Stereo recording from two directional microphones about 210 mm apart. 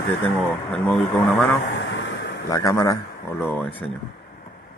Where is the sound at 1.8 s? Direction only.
60° left (ahead or behind).